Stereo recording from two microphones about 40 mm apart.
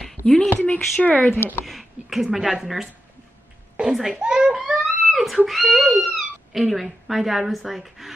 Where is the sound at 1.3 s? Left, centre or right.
Left.